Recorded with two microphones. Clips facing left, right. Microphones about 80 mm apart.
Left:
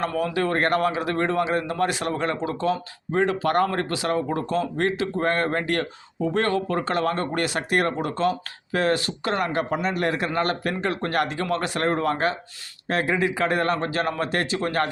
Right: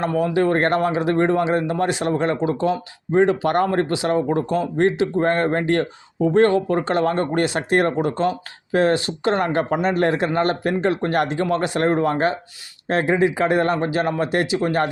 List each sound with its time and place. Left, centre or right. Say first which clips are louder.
0.0 s speech: right 5 dB; right